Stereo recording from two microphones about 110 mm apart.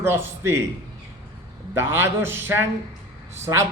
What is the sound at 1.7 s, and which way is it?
Speech, 20° right (ahead or behind).